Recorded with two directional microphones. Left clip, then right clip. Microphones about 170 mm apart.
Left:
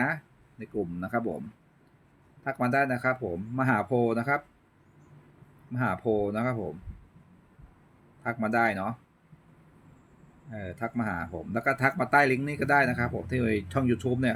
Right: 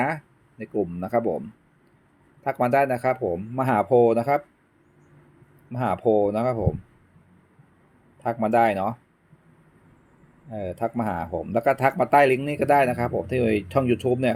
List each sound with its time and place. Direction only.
0.6 s speech: 25° right (ahead or behind)
2.4 s speech: 30° right (ahead or behind)
5.7 s speech: 30° right (ahead or behind)
8.2 s speech: 30° right (ahead or behind)
10.5 s speech: 30° right (ahead or behind)